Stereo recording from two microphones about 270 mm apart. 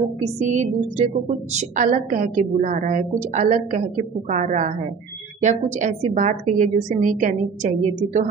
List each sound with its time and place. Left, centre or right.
0.4 s a woman's voice: right